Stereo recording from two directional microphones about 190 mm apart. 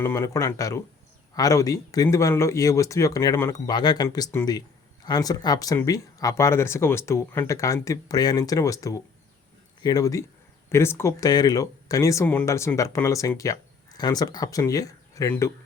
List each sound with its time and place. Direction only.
0.0 s speech: 15° left (ahead or behind)